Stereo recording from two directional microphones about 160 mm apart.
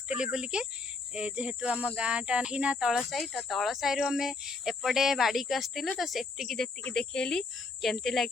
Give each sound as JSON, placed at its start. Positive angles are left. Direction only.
{"t": 0.1, "sound": "speech", "side_deg": -5}